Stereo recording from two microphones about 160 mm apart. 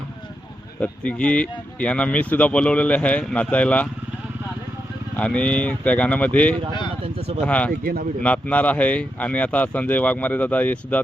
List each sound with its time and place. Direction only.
0.8 s speech: 10° left (ahead or behind)
5.1 s speech: 10° left (ahead or behind)
7.0 s speech: 40° right (ahead or behind)
7.4 s speech: 10° left (ahead or behind)
7.7 s speech: 65° right (ahead or behind)
8.2 s speech: 10° left (ahead or behind)